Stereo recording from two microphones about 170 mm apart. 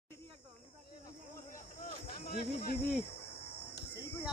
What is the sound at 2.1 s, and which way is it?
Speech, 65° left (ahead or behind).